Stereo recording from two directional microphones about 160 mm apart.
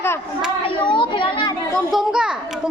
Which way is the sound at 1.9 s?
5° right (ahead or behind).